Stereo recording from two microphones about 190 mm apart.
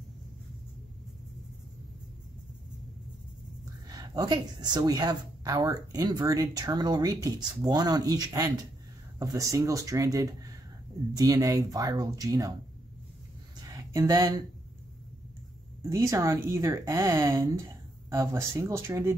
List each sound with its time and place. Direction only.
3.9 s speech: 20° right (ahead or behind)
13.7 s a sound: 15° right (ahead or behind)
15.9 s speech: 15° right (ahead or behind)